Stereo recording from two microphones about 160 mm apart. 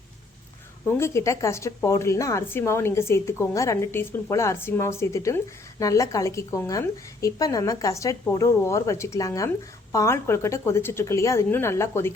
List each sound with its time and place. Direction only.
0.9 s a woman's voice: 15° left (ahead or behind)